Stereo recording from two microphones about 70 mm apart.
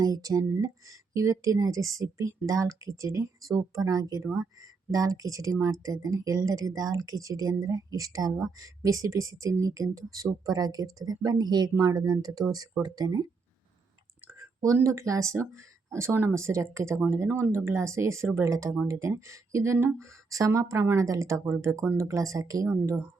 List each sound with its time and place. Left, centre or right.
0.0 s speech: right
11.8 s speech: right
14.3 s a sound: right
14.8 s speech: right